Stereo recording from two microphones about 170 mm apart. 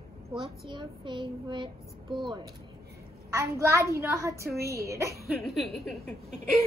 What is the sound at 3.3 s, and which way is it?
A child's voice, 15° right (ahead or behind).